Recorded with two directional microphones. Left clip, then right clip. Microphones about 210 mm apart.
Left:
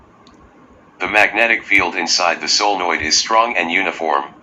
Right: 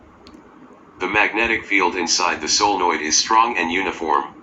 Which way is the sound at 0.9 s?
20° left (ahead or behind).